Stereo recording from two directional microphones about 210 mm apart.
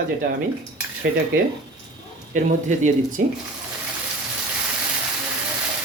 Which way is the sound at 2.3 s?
35° right (ahead or behind).